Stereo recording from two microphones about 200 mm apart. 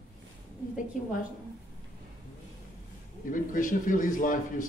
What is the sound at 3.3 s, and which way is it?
A woman's voice, 40° left (ahead or behind).